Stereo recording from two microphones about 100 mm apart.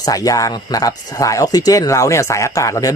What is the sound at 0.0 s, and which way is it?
A man's voice, 35° left (ahead or behind).